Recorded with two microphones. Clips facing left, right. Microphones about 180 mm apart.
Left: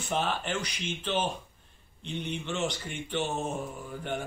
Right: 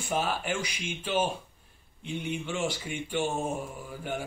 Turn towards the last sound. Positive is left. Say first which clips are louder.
# even
turn(degrees=-5)  # may be behind; listen again after turning